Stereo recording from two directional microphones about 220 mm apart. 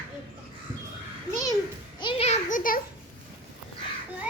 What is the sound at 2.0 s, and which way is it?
Children playing, 25° left (ahead or behind).